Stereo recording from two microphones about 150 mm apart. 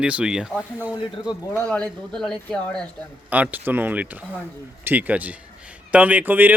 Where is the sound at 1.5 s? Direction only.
5° left (ahead or behind).